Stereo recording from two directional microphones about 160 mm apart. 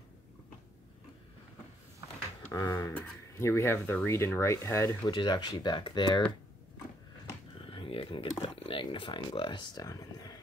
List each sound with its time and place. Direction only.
2.5 s speech: 20° left (ahead or behind)
7.7 s a sound: 35° left (ahead or behind)
8.4 s speech: 35° left (ahead or behind)